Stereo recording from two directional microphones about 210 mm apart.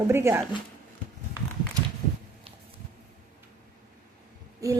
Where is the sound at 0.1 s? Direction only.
10° right (ahead or behind).